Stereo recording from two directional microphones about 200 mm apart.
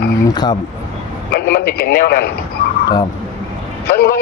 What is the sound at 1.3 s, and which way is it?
Speech, 50° left (ahead or behind).